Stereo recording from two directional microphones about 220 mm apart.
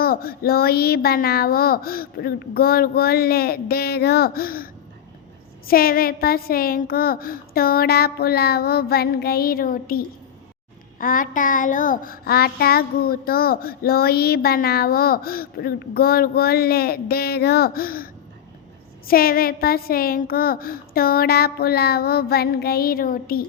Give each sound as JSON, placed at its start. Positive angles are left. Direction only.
{"t": 0.0, "sound": "child singing", "side_deg": 45}